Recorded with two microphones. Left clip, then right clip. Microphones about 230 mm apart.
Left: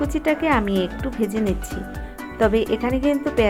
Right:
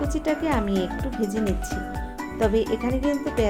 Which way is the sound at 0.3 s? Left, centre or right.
Left.